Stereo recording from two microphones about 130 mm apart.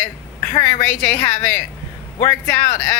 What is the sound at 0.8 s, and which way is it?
A woman's voice, 10° left (ahead or behind).